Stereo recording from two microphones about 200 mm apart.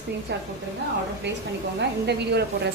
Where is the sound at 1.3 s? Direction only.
60° right (ahead or behind).